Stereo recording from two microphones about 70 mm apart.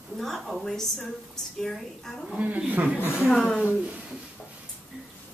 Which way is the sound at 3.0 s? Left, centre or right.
Left.